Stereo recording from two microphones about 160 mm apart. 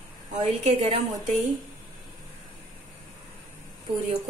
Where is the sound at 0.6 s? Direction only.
40° right (ahead or behind).